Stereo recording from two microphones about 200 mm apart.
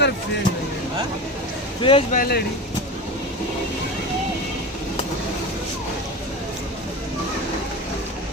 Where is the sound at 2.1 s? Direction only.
50° left (ahead or behind).